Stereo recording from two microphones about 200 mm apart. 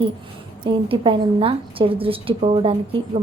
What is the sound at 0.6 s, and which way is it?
A woman's voice, 25° right (ahead or behind).